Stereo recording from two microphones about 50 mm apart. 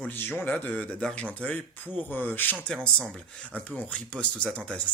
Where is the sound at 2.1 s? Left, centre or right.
Left.